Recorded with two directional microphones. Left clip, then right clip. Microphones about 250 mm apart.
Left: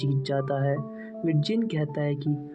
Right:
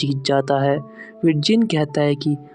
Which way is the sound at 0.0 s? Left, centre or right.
Right.